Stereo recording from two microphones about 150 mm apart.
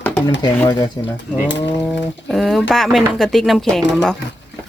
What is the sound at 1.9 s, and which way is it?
Speech, centre (ahead or behind).